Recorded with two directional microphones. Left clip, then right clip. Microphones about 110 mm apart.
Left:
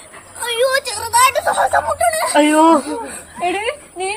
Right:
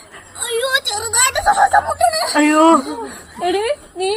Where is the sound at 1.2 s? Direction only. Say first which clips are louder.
Right 5 dB; 15° left (ahead or behind).